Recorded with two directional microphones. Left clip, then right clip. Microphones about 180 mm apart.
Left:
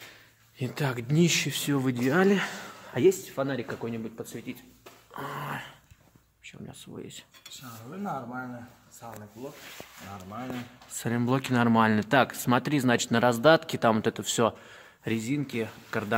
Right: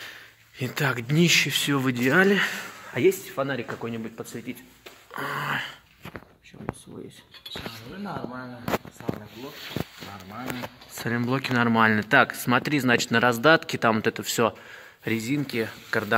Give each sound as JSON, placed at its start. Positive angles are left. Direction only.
{"t": 0.6, "sound": "speech", "side_deg": 5}
{"t": 2.2, "sound": "speech", "side_deg": 20}
{"t": 5.1, "sound": "a sound", "side_deg": 0}
{"t": 11.0, "sound": "speech", "side_deg": 20}